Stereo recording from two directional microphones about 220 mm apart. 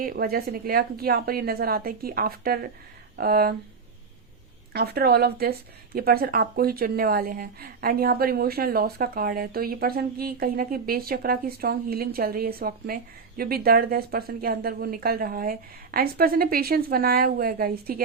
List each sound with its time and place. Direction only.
0.0 s speech: 40° right (ahead or behind)
4.7 s speech: 45° right (ahead or behind)